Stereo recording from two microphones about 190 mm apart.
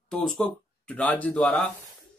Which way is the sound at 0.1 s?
5° left (ahead or behind).